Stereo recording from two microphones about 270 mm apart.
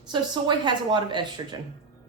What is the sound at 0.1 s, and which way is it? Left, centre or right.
A woman's voice, centre.